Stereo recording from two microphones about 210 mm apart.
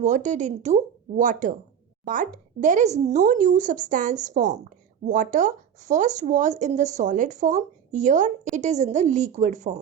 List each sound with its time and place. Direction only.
0.0 s speech: 35° right (ahead or behind)